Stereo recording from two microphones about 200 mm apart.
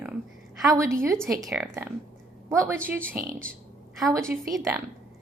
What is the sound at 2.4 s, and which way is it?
Speech, 15° right (ahead or behind).